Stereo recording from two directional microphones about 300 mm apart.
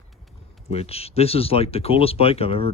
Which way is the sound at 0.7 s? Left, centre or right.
Centre.